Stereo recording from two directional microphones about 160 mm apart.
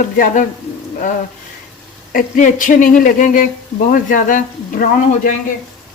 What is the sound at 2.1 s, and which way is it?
Speech, 55° left (ahead or behind).